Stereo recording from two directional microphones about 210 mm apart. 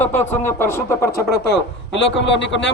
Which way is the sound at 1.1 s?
55° left (ahead or behind).